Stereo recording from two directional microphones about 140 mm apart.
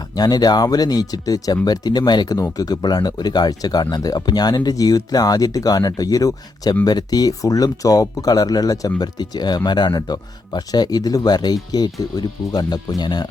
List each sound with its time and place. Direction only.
0.2 s speech: 30° left (ahead or behind)